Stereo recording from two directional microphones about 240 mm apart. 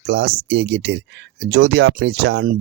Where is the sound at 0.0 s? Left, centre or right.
Right.